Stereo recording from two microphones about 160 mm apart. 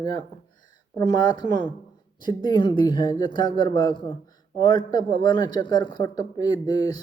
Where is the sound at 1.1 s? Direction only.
25° left (ahead or behind).